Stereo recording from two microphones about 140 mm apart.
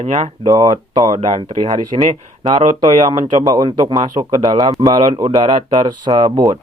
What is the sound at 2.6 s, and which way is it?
Speech, 55° right (ahead or behind).